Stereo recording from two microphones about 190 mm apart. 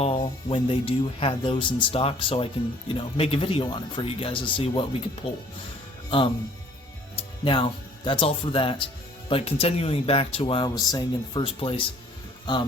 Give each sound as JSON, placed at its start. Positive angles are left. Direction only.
{"t": 0.0, "sound": "speech", "side_deg": 30}
{"t": 7.4, "sound": "speech", "side_deg": 25}